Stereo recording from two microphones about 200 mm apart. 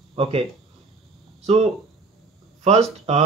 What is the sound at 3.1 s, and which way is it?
Speech, 35° right (ahead or behind).